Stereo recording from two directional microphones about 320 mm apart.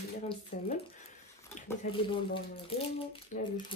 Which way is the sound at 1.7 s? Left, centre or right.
Centre.